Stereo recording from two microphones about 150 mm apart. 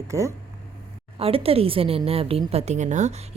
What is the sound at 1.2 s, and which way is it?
A woman's voice, 40° right (ahead or behind).